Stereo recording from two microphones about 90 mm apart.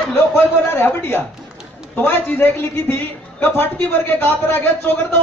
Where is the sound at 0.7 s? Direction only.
25° left (ahead or behind).